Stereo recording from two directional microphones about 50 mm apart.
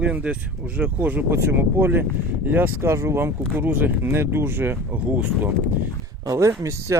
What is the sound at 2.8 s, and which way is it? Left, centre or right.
Speech, right.